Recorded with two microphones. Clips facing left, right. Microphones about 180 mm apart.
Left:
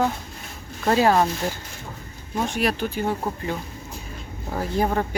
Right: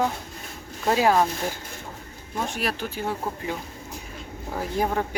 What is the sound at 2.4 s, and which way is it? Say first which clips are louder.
Speech: left 5 dB; centre (ahead or behind).